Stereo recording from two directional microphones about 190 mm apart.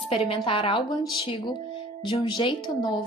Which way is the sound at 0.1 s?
30° left (ahead or behind).